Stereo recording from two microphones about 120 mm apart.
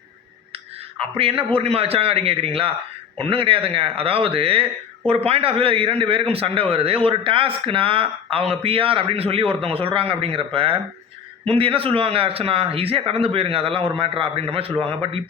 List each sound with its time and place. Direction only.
0.5 s a man's voice: 55° right (ahead or behind)